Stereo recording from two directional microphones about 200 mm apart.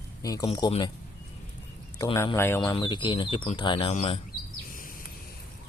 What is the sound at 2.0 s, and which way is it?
A man's voice, 20° left (ahead or behind).